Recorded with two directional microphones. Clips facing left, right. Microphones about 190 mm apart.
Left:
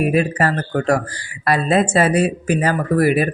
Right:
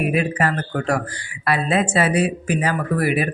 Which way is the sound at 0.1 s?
40° left (ahead or behind).